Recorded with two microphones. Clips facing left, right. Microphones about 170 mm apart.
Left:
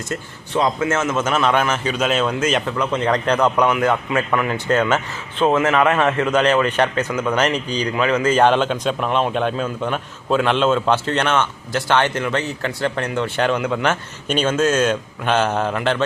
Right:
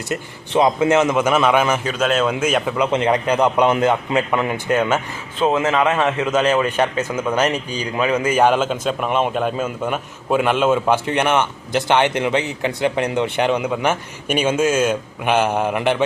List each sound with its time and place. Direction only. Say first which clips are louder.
0.1 s a man's voice: right 4 dB; 20° right (ahead or behind)
6.1 s speech: left 1 dB; 5° right (ahead or behind)